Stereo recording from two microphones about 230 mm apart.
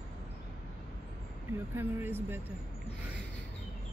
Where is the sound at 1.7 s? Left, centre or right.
Centre.